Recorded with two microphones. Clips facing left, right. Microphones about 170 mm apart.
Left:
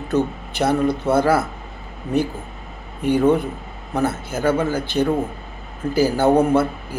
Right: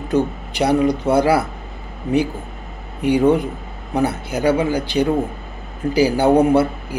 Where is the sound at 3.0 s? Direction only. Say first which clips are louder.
Right 2 dB; 15° right (ahead or behind).